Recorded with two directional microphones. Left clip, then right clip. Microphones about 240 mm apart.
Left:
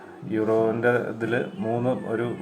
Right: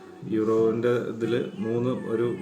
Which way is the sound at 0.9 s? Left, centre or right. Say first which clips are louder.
Left 1 dB; centre.